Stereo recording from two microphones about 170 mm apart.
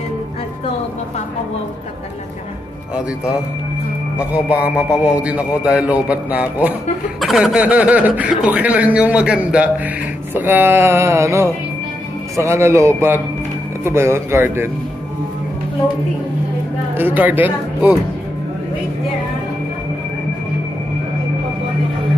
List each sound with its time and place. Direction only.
4.2 s speech: 5° right (ahead or behind)
16.9 s speech: 10° right (ahead or behind)